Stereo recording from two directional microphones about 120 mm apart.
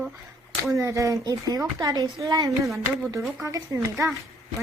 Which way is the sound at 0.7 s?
25° right (ahead or behind).